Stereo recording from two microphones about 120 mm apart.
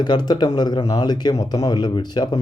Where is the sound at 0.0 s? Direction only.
35° left (ahead or behind).